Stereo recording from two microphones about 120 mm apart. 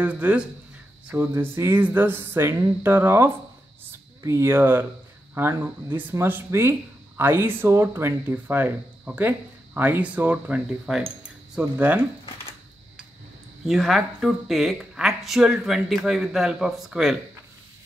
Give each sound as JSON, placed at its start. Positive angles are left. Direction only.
{"t": 0.0, "sound": "speech", "side_deg": -15}
{"t": 13.7, "sound": "speech", "side_deg": 0}